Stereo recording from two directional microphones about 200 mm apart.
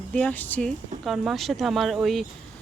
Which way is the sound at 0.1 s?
5° left (ahead or behind).